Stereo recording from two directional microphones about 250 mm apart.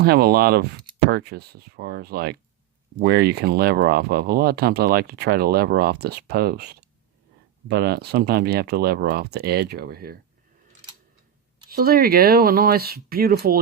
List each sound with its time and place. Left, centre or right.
0.0 s speech: right
11.7 s speech: right